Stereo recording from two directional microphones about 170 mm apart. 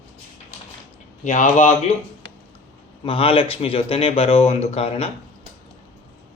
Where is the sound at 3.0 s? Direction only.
35° left (ahead or behind).